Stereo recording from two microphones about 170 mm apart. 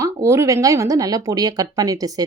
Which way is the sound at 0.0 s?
20° right (ahead or behind).